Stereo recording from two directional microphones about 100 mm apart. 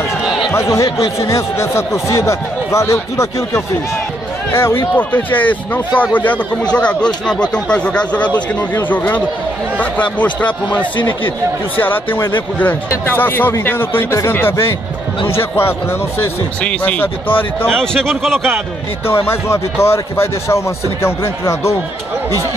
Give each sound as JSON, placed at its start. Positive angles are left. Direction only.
{"t": 0.5, "sound": "speech", "side_deg": 30}
{"t": 17.6, "sound": "a man's voice", "side_deg": 5}
{"t": 19.0, "sound": "speech", "side_deg": 25}